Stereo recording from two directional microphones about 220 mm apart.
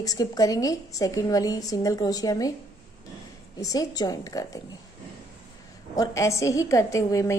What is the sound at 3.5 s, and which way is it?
A woman's voice, 15° left (ahead or behind).